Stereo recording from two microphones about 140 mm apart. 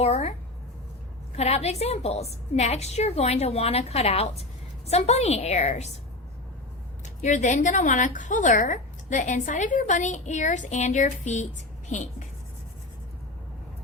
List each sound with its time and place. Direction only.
0.0 s a woman's voice: 50° left (ahead or behind)
1.4 s a woman's voice: 50° left (ahead or behind)
7.0 s a woman's voice: 60° left (ahead or behind)